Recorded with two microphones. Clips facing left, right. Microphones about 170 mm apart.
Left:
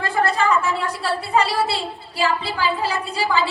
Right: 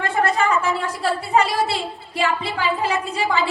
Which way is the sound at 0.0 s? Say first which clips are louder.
Even; 35° left (ahead or behind).